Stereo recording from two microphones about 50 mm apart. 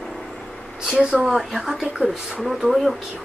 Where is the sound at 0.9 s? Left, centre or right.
Centre.